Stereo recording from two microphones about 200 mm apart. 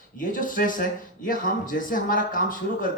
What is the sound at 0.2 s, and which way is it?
Speech, 40° left (ahead or behind).